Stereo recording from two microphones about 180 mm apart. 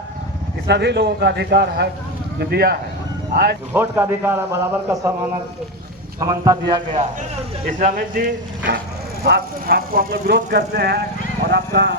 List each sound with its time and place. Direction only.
0.7 s a man's voice: 70° right (ahead or behind)
3.7 s a man's voice: 15° right (ahead or behind)
6.1 s a man's voice: 20° right (ahead or behind)
7.8 s speech: 50° right (ahead or behind); by 11.9 s 70° right (ahead or behind)